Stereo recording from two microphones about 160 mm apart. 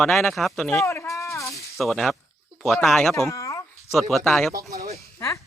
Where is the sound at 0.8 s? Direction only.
15° left (ahead or behind).